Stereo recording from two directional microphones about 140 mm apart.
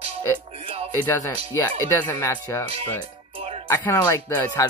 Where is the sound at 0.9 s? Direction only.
15° left (ahead or behind).